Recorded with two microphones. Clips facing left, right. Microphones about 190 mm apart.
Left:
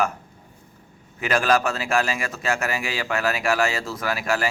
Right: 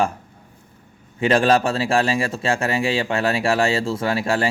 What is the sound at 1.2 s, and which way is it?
Speech, 30° right (ahead or behind).